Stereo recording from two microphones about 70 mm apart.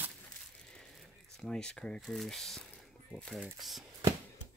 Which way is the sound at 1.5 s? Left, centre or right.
Centre.